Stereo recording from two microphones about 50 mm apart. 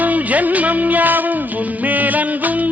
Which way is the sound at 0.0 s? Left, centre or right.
Right.